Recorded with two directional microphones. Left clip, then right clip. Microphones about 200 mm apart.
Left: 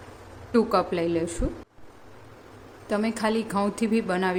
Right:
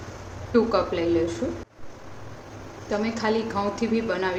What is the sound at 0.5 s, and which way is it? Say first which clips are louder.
Speech: right 1 dB; 55° left (ahead or behind).